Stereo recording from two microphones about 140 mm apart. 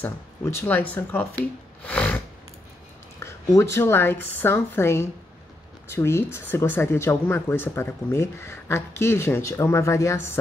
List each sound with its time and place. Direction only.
0.0 s speech: 15° left (ahead or behind)
1.9 s a sound: 5° left (ahead or behind)
3.2 s speech: 20° left (ahead or behind)